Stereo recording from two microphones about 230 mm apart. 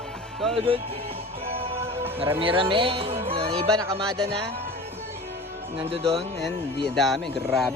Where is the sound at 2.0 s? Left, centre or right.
Centre.